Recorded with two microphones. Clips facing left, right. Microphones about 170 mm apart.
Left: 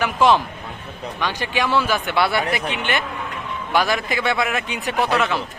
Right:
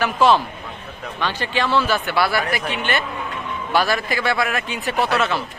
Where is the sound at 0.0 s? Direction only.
15° left (ahead or behind).